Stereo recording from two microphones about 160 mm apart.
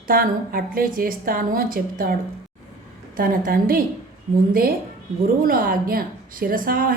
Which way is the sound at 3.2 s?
65° right (ahead or behind).